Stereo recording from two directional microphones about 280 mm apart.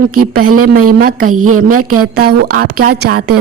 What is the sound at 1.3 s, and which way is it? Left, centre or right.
Speech, right.